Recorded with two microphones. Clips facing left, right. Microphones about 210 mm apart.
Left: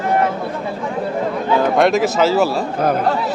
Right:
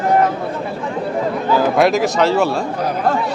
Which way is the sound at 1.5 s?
Centre (ahead or behind).